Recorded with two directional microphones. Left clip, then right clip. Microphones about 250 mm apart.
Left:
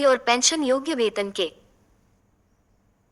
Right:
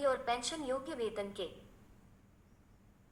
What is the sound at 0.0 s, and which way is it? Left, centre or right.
A woman's voice, left.